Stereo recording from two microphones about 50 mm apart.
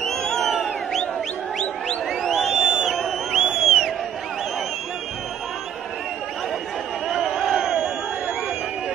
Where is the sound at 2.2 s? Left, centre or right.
Centre.